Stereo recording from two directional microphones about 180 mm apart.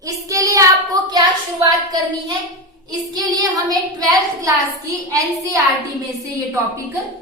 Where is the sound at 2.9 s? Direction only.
20° right (ahead or behind).